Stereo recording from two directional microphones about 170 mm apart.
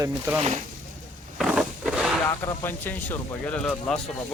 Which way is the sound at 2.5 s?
10° left (ahead or behind).